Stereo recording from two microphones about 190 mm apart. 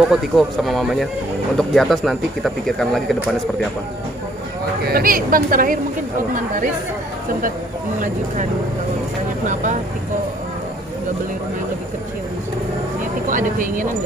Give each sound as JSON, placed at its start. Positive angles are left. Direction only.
{"t": 0.1, "sound": "speech", "side_deg": 0}
{"t": 4.8, "sound": "speech", "side_deg": -50}
{"t": 13.3, "sound": "speech", "side_deg": -45}